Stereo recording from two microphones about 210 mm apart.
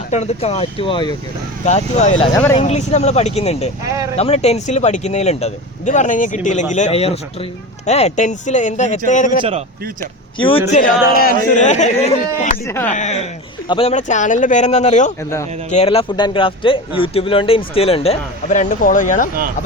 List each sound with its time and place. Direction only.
0.1 s speech: 30° left (ahead or behind)
2.3 s speech: 10° left (ahead or behind)
2.6 s speech: 30° left (ahead or behind)
9.4 s speech: 30° right (ahead or behind)
10.3 s speech: 25° left (ahead or behind)
10.7 s speech: 40° left (ahead or behind)
12.6 s speech: 10° left (ahead or behind)
12.9 s speech: 35° left (ahead or behind)
15.2 s speech: 15° left (ahead or behind)
15.7 s speech: 30° left (ahead or behind)